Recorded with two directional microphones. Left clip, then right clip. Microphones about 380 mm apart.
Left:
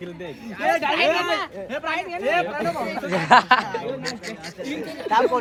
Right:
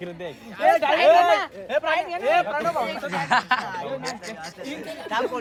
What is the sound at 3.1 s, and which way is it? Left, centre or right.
Speech, centre.